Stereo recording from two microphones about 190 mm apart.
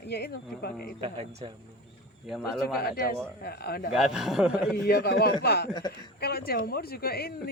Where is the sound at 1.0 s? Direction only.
25° right (ahead or behind).